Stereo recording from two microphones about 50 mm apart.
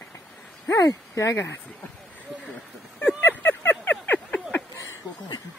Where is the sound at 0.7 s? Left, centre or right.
Left.